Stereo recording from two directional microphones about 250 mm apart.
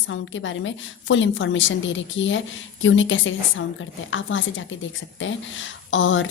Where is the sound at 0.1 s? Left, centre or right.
Left.